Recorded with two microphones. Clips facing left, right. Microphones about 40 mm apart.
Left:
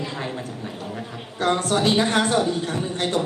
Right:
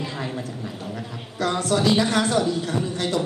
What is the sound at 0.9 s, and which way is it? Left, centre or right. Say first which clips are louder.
A woman's voice: left 1 dB; left.